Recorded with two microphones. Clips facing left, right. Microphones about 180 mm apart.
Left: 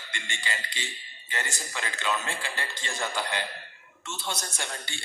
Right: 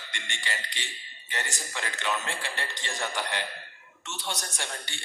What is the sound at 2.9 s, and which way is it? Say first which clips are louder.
Speech: left 1 dB; 20° right (ahead or behind).